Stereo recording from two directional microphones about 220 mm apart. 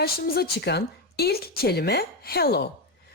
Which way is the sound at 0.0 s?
45° left (ahead or behind).